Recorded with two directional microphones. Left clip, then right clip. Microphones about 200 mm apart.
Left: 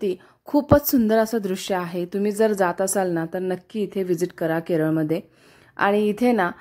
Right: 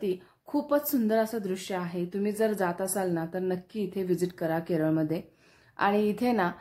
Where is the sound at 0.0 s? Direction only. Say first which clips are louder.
Left 6 dB; 40° left (ahead or behind).